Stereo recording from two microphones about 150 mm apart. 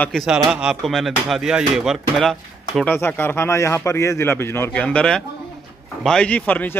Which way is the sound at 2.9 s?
15° left (ahead or behind).